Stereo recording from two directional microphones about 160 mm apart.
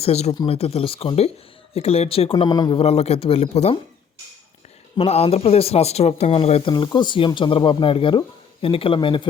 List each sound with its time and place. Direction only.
0.0 s speech: 40° left (ahead or behind)
4.9 s speech: 40° left (ahead or behind)